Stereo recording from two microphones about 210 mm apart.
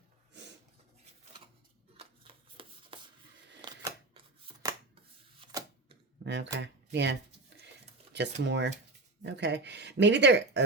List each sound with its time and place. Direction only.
2.0 s shuffling cards: 25° right (ahead or behind)
3.6 s a sound: 20° right (ahead or behind)
6.2 s speech: 55° right (ahead or behind)